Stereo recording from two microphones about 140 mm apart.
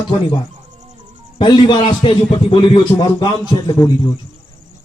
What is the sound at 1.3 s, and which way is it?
A man's voice, 40° left (ahead or behind).